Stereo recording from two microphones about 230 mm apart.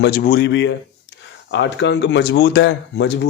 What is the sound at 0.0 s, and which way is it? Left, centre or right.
Speech, left.